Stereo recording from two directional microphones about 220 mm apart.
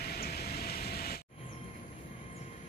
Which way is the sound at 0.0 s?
45° left (ahead or behind).